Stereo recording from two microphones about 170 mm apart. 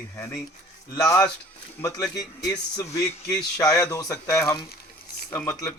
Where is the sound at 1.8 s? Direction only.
20° left (ahead or behind).